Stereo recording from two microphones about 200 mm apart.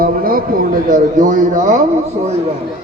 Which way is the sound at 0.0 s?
45° right (ahead or behind).